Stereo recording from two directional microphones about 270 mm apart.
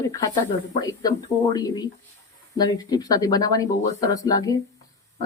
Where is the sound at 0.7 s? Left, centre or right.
Centre.